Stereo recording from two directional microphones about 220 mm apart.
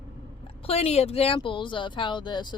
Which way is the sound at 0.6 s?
25° left (ahead or behind).